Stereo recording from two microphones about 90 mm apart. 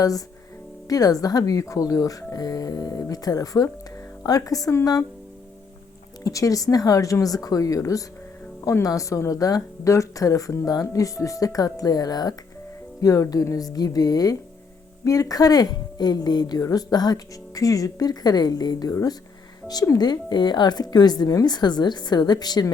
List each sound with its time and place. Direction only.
0.9 s speech: 45° left (ahead or behind)
6.2 s speech: 40° left (ahead or behind)
20.1 s speech: 55° left (ahead or behind)